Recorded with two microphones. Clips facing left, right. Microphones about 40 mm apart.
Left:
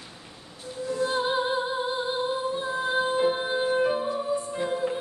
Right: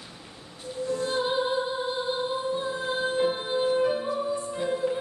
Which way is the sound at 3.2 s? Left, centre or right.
Centre.